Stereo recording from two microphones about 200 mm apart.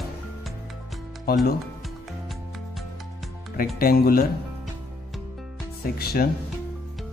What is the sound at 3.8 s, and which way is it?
Speech, 45° left (ahead or behind).